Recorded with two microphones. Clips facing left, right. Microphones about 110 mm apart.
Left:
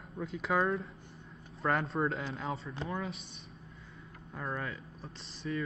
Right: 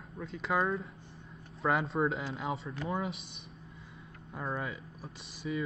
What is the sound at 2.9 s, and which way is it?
Speech, 25° right (ahead or behind).